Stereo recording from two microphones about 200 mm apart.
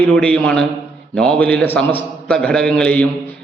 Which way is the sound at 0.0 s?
5° left (ahead or behind).